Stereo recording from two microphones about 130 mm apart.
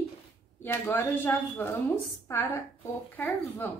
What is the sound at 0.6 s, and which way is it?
A woman's voice, 20° left (ahead or behind).